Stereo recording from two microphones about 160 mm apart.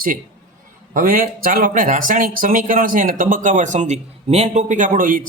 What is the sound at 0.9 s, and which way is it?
Speech, 60° right (ahead or behind).